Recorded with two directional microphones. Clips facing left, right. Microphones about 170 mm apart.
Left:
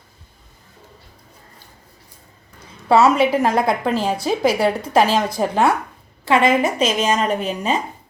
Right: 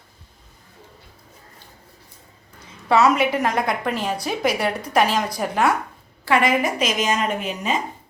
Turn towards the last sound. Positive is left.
turn(degrees=35)  # may be behind; listen again after turning